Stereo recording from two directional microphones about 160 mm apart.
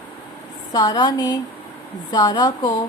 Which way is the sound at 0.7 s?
25° left (ahead or behind).